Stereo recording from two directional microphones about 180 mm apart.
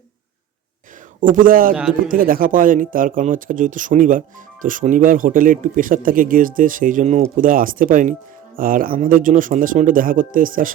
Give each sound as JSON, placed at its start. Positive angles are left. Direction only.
{"t": 1.2, "sound": "a man's voice", "side_deg": -50}
{"t": 1.7, "sound": "speech", "side_deg": -5}
{"t": 2.0, "sound": "a man's voice", "side_deg": -50}